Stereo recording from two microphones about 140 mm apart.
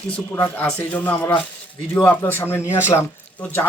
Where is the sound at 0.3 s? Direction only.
10° left (ahead or behind).